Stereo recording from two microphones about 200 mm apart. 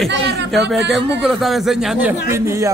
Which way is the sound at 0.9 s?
Centre (ahead or behind).